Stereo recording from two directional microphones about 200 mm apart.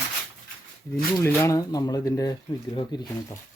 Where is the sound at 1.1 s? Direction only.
10° left (ahead or behind).